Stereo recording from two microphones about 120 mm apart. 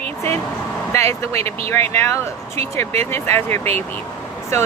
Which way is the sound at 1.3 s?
60° right (ahead or behind).